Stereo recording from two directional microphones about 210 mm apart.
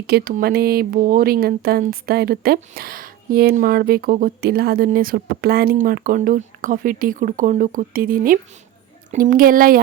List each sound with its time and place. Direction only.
0.1 s speech: 45° right (ahead or behind)